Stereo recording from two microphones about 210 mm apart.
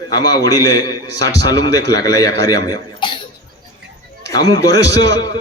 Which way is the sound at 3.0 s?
25° left (ahead or behind).